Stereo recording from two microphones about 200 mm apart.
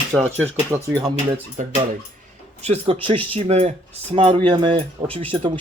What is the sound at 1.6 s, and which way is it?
Speech, 40° right (ahead or behind).